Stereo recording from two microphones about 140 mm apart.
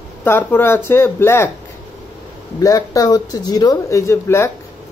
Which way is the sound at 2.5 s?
25° left (ahead or behind).